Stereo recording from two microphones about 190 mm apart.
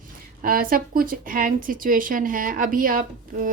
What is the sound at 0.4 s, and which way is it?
A woman's voice, 50° right (ahead or behind).